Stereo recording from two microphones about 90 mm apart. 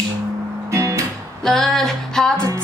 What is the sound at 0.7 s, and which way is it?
Music, 35° right (ahead or behind).